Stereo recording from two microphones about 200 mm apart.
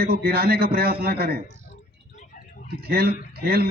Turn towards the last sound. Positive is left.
turn(degrees=-50)  # may be behind; listen again after turning